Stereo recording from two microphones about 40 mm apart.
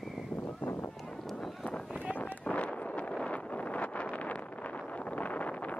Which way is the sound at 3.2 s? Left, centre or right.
Left.